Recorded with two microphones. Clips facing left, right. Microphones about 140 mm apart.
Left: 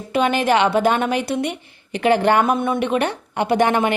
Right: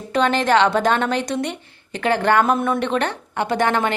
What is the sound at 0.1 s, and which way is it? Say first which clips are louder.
Speech: even; 10° left (ahead or behind).